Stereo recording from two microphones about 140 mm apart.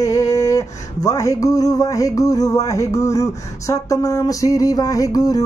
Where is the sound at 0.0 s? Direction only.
25° left (ahead or behind).